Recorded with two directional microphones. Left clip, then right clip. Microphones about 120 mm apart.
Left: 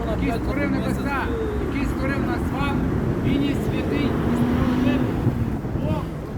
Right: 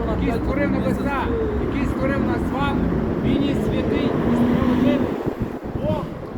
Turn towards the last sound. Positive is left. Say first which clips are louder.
# right 3 dB
turn(degrees=50)  # may be behind; listen again after turning